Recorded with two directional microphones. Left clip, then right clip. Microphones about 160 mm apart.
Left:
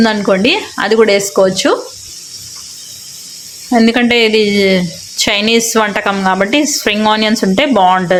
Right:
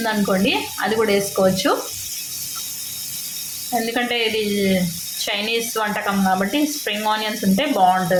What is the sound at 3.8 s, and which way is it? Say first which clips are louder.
A woman's voice: left 11 dB; 90° left.